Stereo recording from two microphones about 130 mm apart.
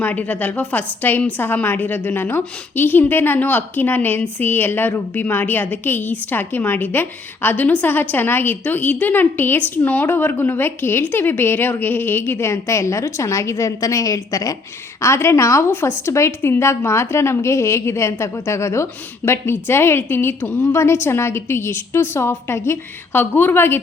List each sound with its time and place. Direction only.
0.0 s a woman's voice: 10° left (ahead or behind)